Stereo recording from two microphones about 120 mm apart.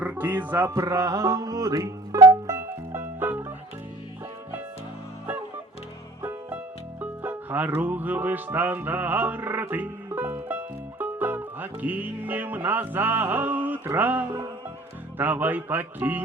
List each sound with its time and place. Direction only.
0.0 s music: 15° right (ahead or behind)
7.0 s music: 15° right (ahead or behind)
15.2 s speech: 15° right (ahead or behind)